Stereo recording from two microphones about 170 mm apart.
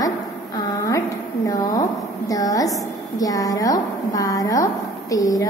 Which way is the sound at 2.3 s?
20° left (ahead or behind).